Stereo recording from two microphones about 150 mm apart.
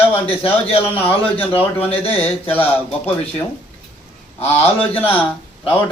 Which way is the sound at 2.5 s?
10° left (ahead or behind).